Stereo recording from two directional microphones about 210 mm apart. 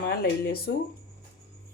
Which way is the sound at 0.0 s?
45° left (ahead or behind).